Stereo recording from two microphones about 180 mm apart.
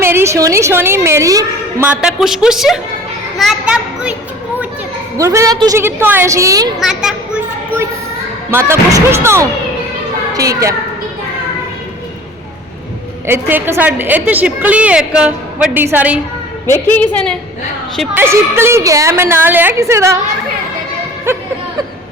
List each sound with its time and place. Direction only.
0.0 s a woman's voice: 15° right (ahead or behind)
1.9 s a woman's voice: 5° right (ahead or behind)
3.3 s a sound: 5° right (ahead or behind)
5.1 s a woman's voice: 15° right (ahead or behind)
6.7 s a sound: centre (ahead or behind)
8.4 s a woman's voice: 15° right (ahead or behind)
13.2 s a woman's voice: 15° right (ahead or behind)
16.7 s a woman's voice: 10° left (ahead or behind)
18.1 s a woman's voice: 10° right (ahead or behind)